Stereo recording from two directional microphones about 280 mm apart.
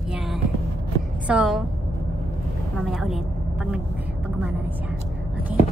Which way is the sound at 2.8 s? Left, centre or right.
Centre.